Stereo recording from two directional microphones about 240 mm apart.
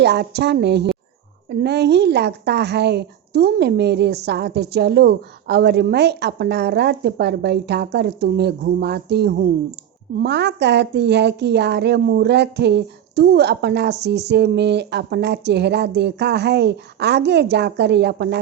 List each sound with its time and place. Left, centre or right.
0.0 s a woman's voice: right